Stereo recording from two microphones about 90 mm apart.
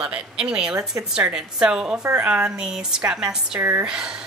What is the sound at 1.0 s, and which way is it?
Speech, 35° right (ahead or behind).